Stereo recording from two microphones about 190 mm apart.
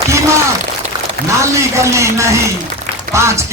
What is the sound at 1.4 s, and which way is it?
Speech, 15° right (ahead or behind).